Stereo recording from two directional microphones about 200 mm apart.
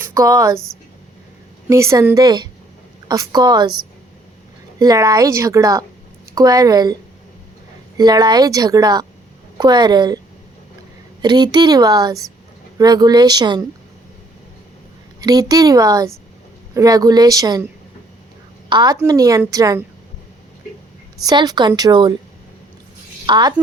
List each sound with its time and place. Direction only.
0.0 s a woman's voice: 15° right (ahead or behind)
1.6 s speech: 15° right (ahead or behind)
4.8 s speech: 15° right (ahead or behind)
7.9 s speech: 20° right (ahead or behind)
11.2 s speech: 20° right (ahead or behind)
15.2 s speech: 20° right (ahead or behind)
18.7 s speech: 20° right (ahead or behind)
21.2 s speech: 20° right (ahead or behind)
23.2 s speech: 20° right (ahead or behind)